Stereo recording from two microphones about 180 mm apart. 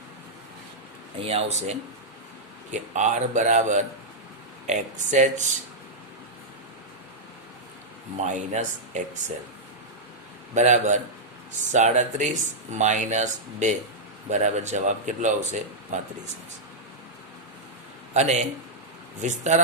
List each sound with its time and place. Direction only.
1.2 s speech: 35° right (ahead or behind)
2.7 s speech: 40° right (ahead or behind)
8.3 s speech: 45° right (ahead or behind)
10.5 s speech: 40° right (ahead or behind)
18.1 s speech: 40° right (ahead or behind)